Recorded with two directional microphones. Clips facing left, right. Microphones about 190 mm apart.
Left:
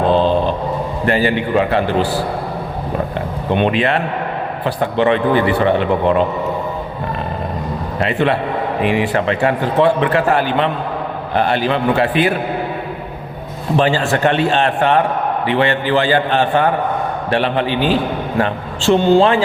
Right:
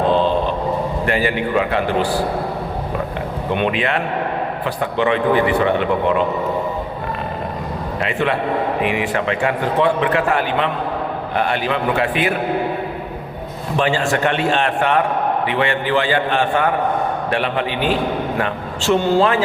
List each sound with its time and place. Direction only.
1.0 s a man's voice: 35° left (ahead or behind)
3.5 s a man's voice: 30° left (ahead or behind)
8.0 s a man's voice: 35° left (ahead or behind)
13.7 s a man's voice: 35° left (ahead or behind)